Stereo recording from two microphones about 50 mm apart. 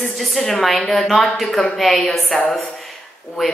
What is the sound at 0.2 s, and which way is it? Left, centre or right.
Speech, centre.